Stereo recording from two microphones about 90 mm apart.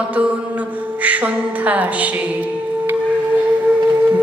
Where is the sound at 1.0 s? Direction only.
15° right (ahead or behind).